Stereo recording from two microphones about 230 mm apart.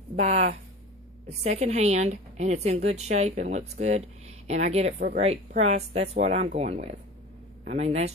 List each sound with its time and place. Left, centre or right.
0.1 s a woman's voice: right